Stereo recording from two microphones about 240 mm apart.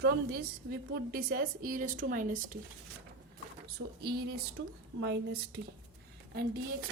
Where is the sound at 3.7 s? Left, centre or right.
Right.